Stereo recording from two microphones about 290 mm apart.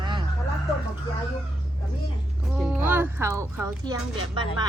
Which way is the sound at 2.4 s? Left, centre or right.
Centre.